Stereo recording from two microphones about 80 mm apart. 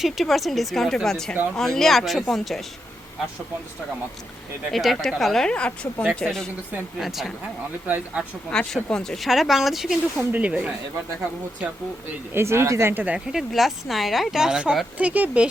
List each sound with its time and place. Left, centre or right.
0.0 s speech: centre
4.7 s speech: centre
7.0 s speech: centre
7.9 s speech: centre
8.4 s speech: centre
10.2 s speech: centre
12.3 s speech: right
13.0 s speech: centre
13.2 s speech: centre